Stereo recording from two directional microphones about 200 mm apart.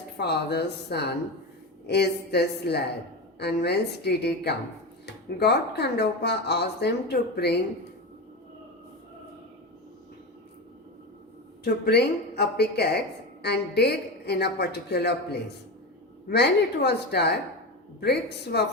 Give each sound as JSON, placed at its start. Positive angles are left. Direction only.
{"t": 0.2, "sound": "speech", "side_deg": 55}
{"t": 11.6, "sound": "speech", "side_deg": 55}